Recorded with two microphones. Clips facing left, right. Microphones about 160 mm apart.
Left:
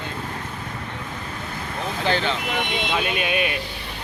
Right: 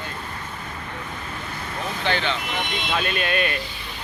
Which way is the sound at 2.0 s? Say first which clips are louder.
Left 2 dB; 40° left (ahead or behind).